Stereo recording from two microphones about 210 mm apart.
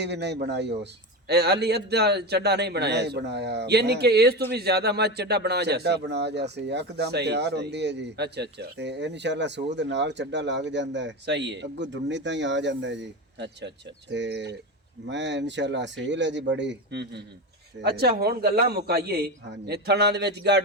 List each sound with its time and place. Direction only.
0.0 s a man's voice: 55° right (ahead or behind)